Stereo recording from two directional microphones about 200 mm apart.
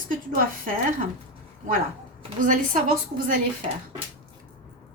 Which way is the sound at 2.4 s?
40° right (ahead or behind).